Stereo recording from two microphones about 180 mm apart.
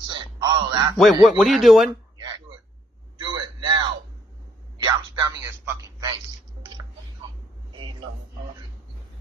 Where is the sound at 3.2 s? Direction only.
25° right (ahead or behind).